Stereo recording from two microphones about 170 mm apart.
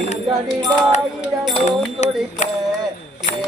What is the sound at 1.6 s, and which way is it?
Speech, 40° left (ahead or behind).